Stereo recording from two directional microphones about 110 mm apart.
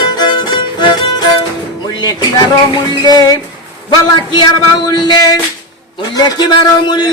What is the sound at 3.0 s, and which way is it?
Music, 35° left (ahead or behind).